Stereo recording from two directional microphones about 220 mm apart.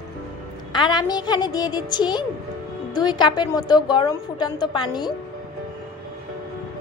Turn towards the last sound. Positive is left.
turn(degrees=20)  # may be behind; listen again after turning